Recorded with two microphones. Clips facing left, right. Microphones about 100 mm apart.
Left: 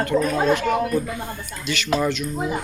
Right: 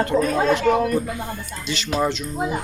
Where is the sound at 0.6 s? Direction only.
Centre (ahead or behind).